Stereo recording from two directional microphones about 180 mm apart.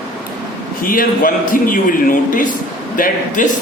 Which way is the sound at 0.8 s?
50° left (ahead or behind).